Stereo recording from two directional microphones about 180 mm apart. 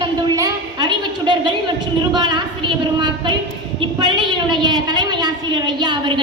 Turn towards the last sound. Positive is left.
turn(degrees=-25)  # may be behind; listen again after turning